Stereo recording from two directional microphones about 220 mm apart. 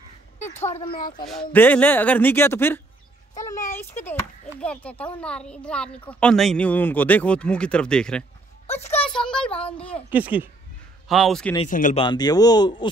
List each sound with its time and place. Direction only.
0.4 s a sound: 30° left (ahead or behind)
0.8 s speech: 40° left (ahead or behind)
1.2 s a child's voice: 5° left (ahead or behind)
8.6 s speech: 30° left (ahead or behind)
9.2 s a child's voice: 5° left (ahead or behind)
10.1 s a child's voice: 5° right (ahead or behind)
11.7 s speech: 35° left (ahead or behind)
12.0 s speech: 20° left (ahead or behind)